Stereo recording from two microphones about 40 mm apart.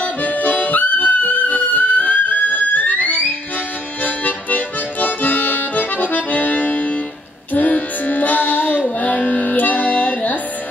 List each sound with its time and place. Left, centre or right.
0.0 s harmonica: left
4.0 s music: left